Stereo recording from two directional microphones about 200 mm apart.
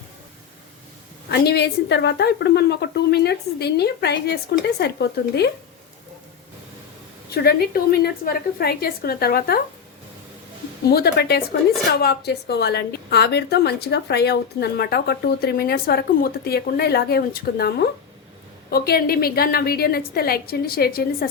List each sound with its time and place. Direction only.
1.3 s a woman's voice: 55° left (ahead or behind)
7.3 s a woman's voice: 50° left (ahead or behind)
10.8 s a woman's voice: 50° left (ahead or behind)